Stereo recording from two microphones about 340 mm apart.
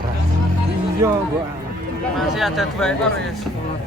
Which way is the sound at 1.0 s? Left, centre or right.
Centre.